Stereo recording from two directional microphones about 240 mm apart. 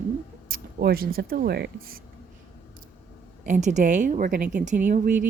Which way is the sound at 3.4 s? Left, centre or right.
Right.